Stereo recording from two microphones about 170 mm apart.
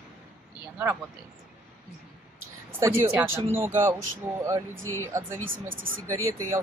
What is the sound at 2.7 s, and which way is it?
Speech, 15° right (ahead or behind).